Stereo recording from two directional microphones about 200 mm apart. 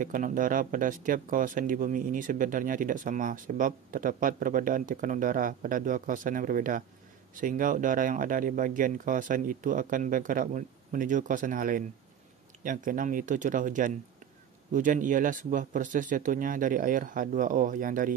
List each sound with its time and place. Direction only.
0.0 s speech: 40° right (ahead or behind)